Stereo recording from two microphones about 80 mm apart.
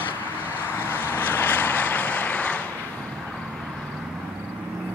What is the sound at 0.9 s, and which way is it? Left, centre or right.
Vehicle, left.